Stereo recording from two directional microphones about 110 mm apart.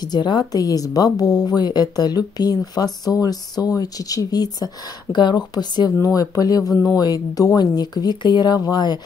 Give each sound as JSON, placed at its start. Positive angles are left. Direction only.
{"t": 0.1, "sound": "a woman's voice", "side_deg": 40}